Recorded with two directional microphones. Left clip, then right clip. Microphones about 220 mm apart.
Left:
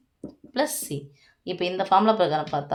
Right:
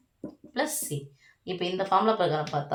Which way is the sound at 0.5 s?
45° left (ahead or behind).